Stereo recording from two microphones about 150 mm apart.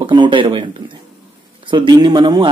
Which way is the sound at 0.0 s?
30° right (ahead or behind).